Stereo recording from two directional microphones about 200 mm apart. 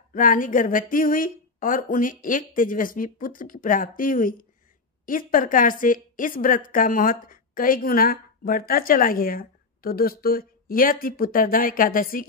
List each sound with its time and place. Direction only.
0.1 s a woman's voice: 40° left (ahead or behind)